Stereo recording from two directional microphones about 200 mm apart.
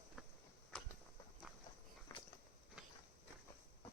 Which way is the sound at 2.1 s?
15° left (ahead or behind).